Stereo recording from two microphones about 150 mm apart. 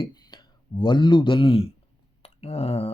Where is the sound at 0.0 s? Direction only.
30° left (ahead or behind).